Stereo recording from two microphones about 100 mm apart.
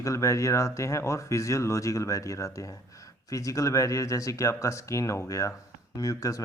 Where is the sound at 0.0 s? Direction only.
30° left (ahead or behind).